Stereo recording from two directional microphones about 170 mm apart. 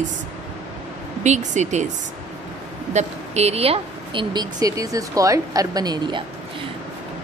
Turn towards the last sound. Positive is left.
turn(degrees=-25)  # may be behind; listen again after turning